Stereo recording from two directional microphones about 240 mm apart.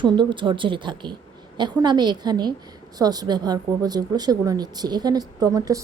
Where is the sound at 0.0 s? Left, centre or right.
Centre.